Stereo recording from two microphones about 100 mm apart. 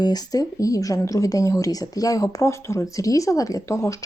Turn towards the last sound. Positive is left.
turn(degrees=30)  # may be behind; listen again after turning